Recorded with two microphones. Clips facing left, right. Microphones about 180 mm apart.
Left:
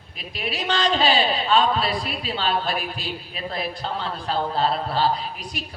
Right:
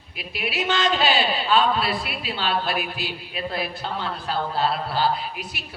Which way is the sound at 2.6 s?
5° right (ahead or behind).